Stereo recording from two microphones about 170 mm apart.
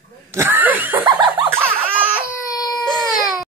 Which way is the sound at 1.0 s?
25° right (ahead or behind).